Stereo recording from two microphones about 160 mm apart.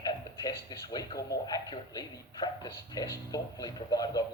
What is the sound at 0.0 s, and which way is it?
Speech, 25° left (ahead or behind).